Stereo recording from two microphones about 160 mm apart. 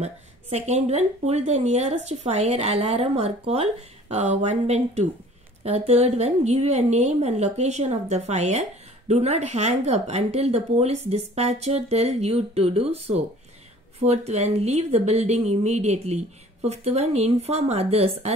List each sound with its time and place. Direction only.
0.0 s a woman's voice: 45° right (ahead or behind)